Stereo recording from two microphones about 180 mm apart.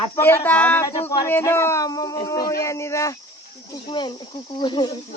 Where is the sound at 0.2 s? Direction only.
10° left (ahead or behind).